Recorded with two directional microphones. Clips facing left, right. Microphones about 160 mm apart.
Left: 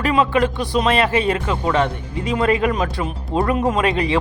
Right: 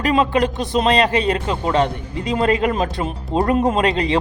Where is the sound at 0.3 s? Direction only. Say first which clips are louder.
Even; 20° right (ahead or behind).